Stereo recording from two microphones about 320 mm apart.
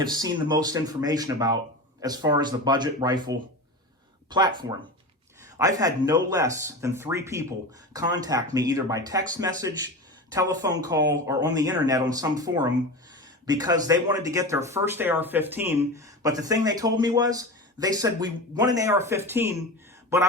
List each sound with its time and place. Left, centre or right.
0.0 s speech: centre